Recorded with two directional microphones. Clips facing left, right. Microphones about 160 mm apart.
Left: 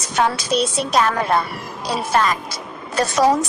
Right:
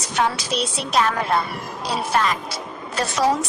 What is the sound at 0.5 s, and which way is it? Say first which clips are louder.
Speech: left 5 dB; 40° left (ahead or behind).